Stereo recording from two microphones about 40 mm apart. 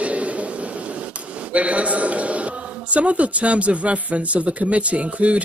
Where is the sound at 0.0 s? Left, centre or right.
Right.